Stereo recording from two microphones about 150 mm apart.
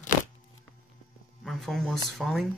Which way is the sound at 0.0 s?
60° left (ahead or behind).